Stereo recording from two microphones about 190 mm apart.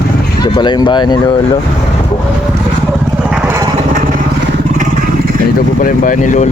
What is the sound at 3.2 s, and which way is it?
Vehicle, 5° right (ahead or behind).